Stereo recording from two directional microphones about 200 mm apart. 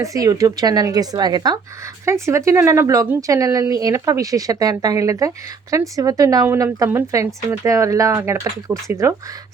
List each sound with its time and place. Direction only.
0.0 s speech: 15° right (ahead or behind)